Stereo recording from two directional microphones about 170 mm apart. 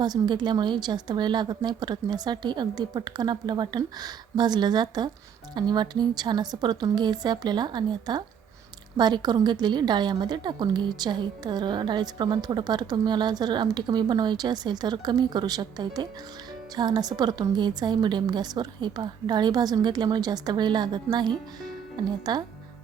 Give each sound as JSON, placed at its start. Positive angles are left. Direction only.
{"t": 0.0, "sound": "a woman's voice", "side_deg": -25}